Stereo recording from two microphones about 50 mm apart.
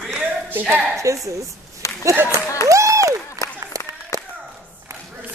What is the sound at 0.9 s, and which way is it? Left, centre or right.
Speech, right.